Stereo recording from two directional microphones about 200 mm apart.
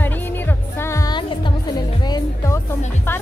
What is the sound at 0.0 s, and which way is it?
Music, 10° left (ahead or behind).